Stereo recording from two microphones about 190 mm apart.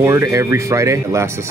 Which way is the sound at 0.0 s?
15° right (ahead or behind).